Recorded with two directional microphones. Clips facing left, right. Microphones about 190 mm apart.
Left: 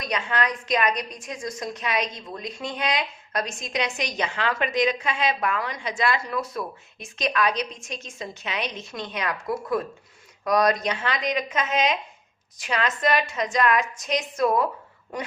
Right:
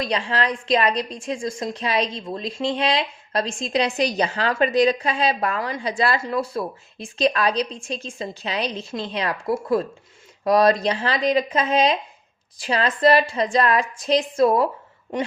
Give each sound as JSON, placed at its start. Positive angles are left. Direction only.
{"t": 0.0, "sound": "a woman's voice", "side_deg": -30}